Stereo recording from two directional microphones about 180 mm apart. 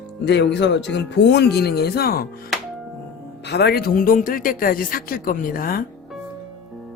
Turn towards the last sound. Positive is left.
turn(degrees=50)  # may be behind; listen again after turning